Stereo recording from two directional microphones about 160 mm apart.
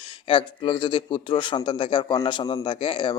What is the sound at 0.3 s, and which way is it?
A man's voice, 30° left (ahead or behind).